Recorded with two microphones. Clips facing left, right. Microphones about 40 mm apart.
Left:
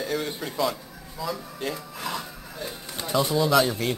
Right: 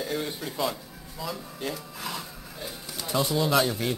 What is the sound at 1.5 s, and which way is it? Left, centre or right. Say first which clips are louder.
Music: left 2 dB; centre.